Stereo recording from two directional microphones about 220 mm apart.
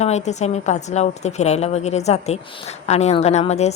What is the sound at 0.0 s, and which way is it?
Speech, 30° left (ahead or behind).